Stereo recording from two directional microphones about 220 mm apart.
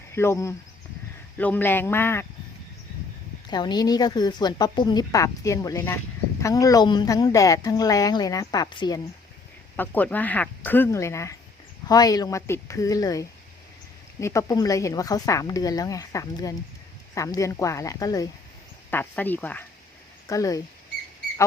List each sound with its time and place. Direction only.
0.1 s a woman's voice: 10° left (ahead or behind)
3.5 s a woman's voice: 20° left (ahead or behind)
9.7 s a woman's voice: 10° left (ahead or behind)